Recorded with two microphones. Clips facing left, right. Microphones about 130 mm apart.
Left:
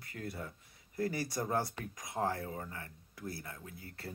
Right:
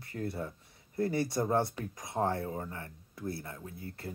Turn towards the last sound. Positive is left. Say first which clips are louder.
# right 5 dB
turn(degrees=-25)  # may be behind; listen again after turning